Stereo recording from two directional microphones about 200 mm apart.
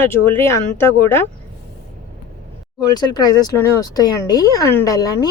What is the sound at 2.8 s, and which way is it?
Speech, 20° left (ahead or behind).